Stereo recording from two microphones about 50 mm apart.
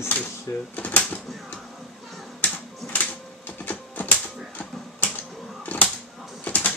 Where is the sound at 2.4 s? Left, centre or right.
Left.